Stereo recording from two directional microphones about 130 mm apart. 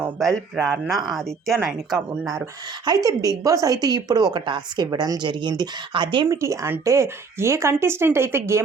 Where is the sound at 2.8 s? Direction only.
30° right (ahead or behind).